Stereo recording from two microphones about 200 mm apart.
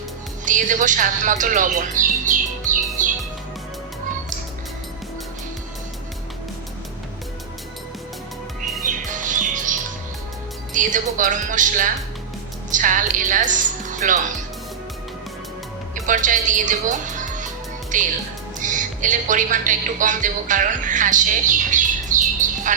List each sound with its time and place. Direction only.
0.4 s speech: 40° right (ahead or behind)
3.0 s music: 40° right (ahead or behind)
8.8 s music: 40° right (ahead or behind)
10.8 s speech: 40° right (ahead or behind)
16.0 s a woman's voice: 40° right (ahead or behind)